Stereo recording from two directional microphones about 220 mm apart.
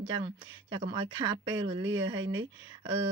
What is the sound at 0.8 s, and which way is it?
Speech, 20° right (ahead or behind).